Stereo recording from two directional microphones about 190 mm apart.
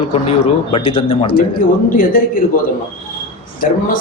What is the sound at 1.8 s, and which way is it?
Speech, 45° left (ahead or behind).